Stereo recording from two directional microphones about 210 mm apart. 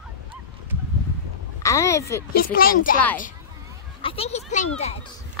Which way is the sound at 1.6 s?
15° left (ahead or behind).